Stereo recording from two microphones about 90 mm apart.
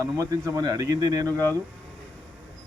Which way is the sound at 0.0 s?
40° right (ahead or behind).